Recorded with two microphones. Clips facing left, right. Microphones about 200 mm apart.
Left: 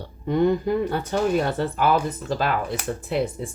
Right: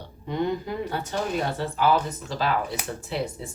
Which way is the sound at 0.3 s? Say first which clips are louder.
Left 7 dB; 50° left (ahead or behind).